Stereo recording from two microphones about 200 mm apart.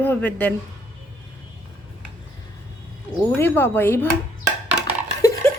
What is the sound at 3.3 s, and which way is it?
Speech, 10° left (ahead or behind).